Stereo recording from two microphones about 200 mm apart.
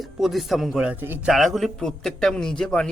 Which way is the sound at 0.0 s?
Centre (ahead or behind).